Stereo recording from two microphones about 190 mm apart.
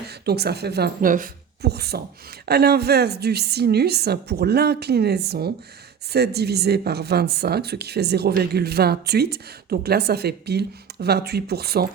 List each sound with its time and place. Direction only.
0.1 s a woman's voice: 60° right (ahead or behind)